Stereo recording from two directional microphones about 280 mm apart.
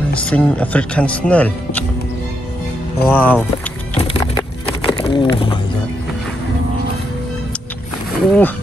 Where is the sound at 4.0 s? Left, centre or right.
Centre.